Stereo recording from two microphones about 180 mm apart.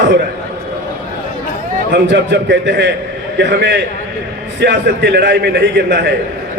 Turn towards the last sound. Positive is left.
turn(degrees=-70)  # may be behind; listen again after turning